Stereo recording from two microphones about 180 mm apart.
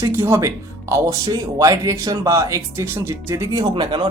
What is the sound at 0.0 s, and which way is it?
Speech, 15° right (ahead or behind).